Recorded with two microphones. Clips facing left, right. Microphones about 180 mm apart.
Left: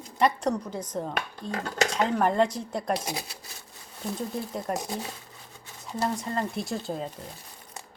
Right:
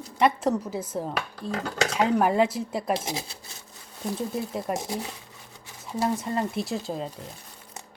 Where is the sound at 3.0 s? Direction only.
25° right (ahead or behind).